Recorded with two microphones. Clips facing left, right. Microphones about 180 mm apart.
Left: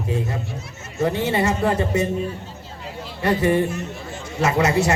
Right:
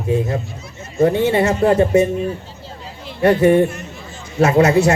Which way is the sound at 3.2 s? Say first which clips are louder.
Right 7 dB; 55° right (ahead or behind).